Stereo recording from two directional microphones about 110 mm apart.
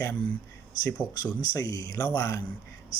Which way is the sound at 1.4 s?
35° left (ahead or behind).